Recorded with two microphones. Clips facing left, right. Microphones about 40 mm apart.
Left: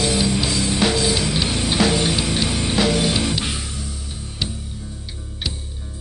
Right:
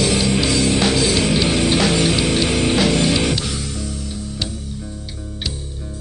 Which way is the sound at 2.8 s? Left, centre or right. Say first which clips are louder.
Left 2 dB; centre.